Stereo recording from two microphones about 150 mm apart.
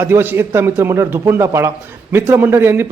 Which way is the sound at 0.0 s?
15° right (ahead or behind).